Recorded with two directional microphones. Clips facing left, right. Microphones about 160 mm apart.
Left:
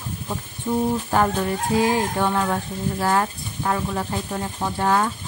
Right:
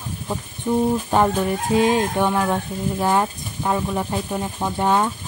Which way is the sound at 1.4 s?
20° right (ahead or behind).